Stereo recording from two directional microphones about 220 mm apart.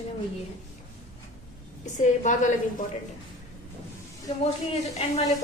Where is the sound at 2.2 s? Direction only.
35° left (ahead or behind).